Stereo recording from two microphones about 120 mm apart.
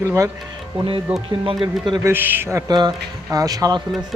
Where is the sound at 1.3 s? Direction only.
45° right (ahead or behind).